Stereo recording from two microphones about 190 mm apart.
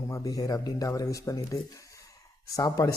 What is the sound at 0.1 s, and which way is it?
Speech, 20° left (ahead or behind).